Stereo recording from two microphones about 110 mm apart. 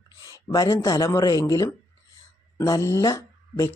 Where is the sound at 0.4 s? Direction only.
30° left (ahead or behind).